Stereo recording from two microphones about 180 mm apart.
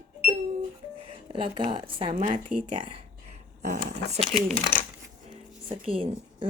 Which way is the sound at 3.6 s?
45° right (ahead or behind).